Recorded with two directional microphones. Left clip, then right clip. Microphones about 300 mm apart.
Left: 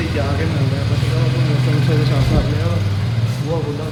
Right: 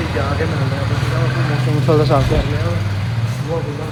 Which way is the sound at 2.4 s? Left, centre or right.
Centre.